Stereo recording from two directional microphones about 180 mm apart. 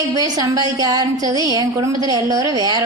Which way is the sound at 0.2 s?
20° right (ahead or behind).